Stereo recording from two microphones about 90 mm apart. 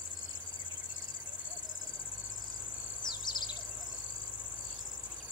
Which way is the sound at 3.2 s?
55° left (ahead or behind).